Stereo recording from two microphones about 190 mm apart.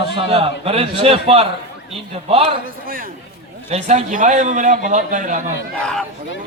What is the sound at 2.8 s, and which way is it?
Speech, 50° right (ahead or behind).